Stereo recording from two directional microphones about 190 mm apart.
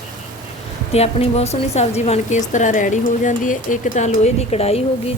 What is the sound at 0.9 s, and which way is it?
Speech, 35° left (ahead or behind).